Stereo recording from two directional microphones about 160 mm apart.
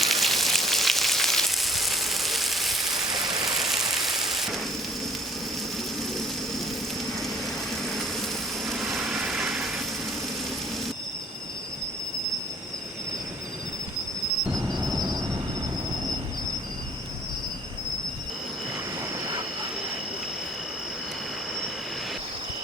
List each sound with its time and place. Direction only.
0.0 s frying: centre (ahead or behind)
3.1 s a sound: 25° right (ahead or behind)
3.5 s vehicle: centre (ahead or behind)
3.8 s rain: centre (ahead or behind)
8.6 s vehicle: centre (ahead or behind)
14.8 s cricket: 25° right (ahead or behind)